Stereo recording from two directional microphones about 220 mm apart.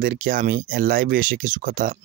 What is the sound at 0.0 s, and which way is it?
Speech, 40° right (ahead or behind).